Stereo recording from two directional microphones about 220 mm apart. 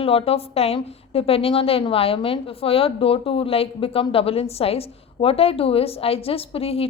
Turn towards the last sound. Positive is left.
turn(degrees=25)  # may be behind; listen again after turning